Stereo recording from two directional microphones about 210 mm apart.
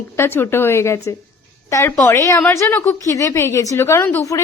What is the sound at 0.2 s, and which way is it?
A woman's voice, 10° left (ahead or behind).